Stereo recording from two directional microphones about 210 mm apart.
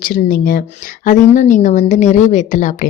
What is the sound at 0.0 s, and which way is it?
A woman's voice, 40° left (ahead or behind).